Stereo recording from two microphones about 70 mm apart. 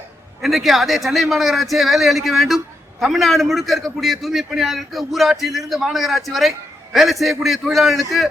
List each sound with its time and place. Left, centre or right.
0.4 s a man's voice: centre